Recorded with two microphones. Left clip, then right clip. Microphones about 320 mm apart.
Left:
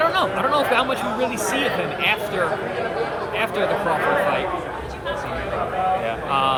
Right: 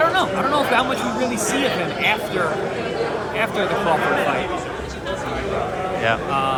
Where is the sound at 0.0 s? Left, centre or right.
Centre.